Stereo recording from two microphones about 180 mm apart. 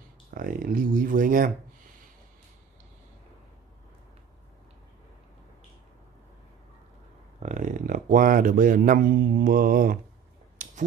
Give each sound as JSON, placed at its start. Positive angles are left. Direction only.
{"t": 0.3, "sound": "speech", "side_deg": -55}
{"t": 7.3, "sound": "speech", "side_deg": -45}
{"t": 10.6, "sound": "finger snapping", "side_deg": -45}